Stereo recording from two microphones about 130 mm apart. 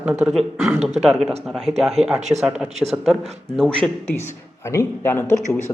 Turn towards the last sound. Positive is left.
turn(degrees=15)  # may be behind; listen again after turning